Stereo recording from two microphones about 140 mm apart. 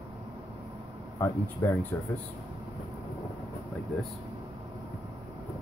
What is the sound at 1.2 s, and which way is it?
Speech, 20° left (ahead or behind).